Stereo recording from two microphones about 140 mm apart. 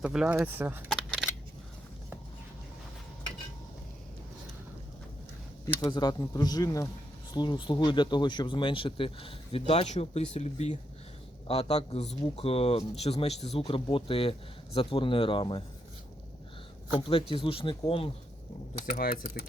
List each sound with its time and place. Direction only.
0.0 s speech: 5° right (ahead or behind)
0.9 s a sound: centre (ahead or behind)
5.6 s a man's voice: 25° left (ahead or behind)
17.0 s speech: 40° left (ahead or behind)
18.9 s speech: 90° left